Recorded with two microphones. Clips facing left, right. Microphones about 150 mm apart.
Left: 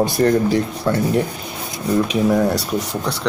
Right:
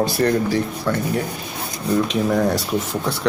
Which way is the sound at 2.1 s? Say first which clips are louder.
Left 2 dB; 5° left (ahead or behind).